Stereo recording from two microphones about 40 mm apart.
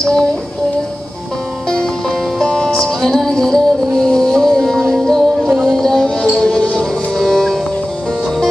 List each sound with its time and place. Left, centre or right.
0.0 s a sound: centre
1.7 s music: centre
3.0 s music: centre
7.2 s music: centre